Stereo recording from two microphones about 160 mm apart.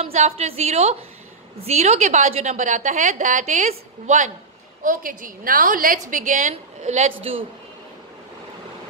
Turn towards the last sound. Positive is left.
turn(degrees=-40)  # may be behind; listen again after turning